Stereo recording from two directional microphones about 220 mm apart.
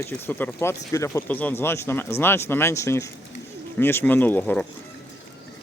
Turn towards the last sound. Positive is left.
turn(degrees=10)  # may be behind; listen again after turning